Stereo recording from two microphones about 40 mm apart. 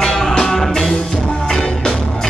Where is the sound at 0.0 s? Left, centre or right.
Centre.